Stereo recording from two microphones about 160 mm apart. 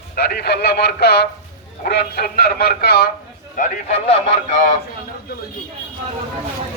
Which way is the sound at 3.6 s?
45° left (ahead or behind).